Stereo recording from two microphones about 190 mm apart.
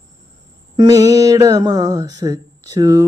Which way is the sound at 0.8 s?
15° right (ahead or behind).